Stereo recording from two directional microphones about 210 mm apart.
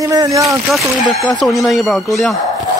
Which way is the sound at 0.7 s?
Centre (ahead or behind).